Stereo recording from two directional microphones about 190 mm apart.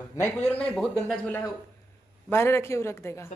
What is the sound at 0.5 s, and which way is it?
Speech, 5° left (ahead or behind).